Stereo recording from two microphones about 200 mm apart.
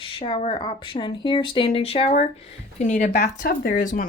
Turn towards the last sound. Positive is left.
turn(degrees=45)  # may be behind; listen again after turning